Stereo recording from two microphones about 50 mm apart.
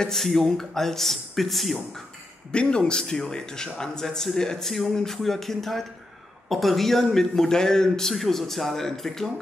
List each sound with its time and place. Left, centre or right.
0.0 s speech: centre
2.5 s a man's voice: centre